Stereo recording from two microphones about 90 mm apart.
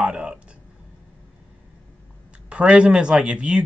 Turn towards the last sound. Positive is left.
turn(degrees=-10)  # may be behind; listen again after turning